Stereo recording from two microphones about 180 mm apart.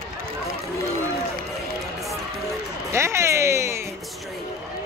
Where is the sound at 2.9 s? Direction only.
15° right (ahead or behind).